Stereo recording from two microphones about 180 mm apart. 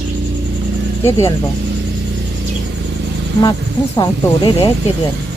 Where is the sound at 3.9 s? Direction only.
25° left (ahead or behind).